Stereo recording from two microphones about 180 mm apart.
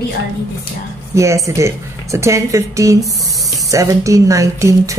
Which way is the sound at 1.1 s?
15° right (ahead or behind).